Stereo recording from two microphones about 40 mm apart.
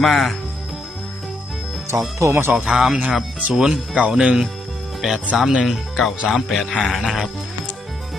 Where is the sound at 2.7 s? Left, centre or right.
Centre.